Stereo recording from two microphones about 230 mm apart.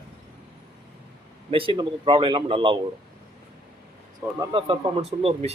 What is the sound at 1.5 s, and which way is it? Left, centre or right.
Speech, right.